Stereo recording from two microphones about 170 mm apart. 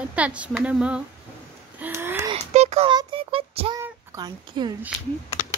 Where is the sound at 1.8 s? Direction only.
10° right (ahead or behind).